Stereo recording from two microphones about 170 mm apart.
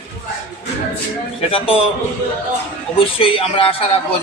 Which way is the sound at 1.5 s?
35° left (ahead or behind).